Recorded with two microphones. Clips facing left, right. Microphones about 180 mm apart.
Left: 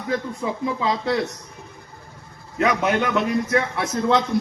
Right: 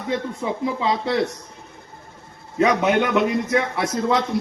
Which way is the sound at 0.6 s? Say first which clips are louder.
Right 1 dB; 20° right (ahead or behind).